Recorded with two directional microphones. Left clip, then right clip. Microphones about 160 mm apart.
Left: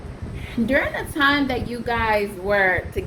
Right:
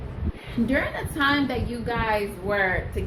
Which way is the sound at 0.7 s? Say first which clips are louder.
Left 5 dB; 60° left (ahead or behind).